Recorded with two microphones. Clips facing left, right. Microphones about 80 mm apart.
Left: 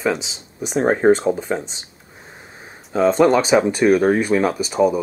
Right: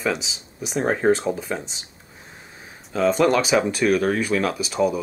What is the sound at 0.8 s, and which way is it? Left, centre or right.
Speech, centre.